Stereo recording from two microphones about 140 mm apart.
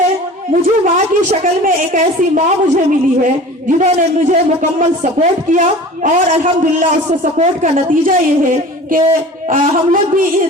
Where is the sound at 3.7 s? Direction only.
60° right (ahead or behind).